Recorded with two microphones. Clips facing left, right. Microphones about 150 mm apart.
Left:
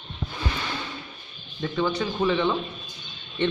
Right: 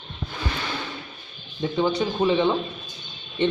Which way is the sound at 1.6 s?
25° right (ahead or behind).